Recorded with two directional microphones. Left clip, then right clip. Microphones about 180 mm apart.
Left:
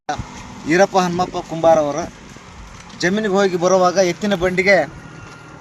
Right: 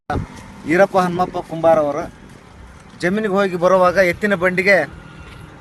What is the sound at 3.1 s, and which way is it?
Speech, 30° right (ahead or behind).